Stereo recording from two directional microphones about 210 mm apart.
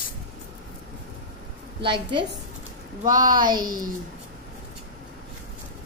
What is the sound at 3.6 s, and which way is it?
Speech, 40° right (ahead or behind).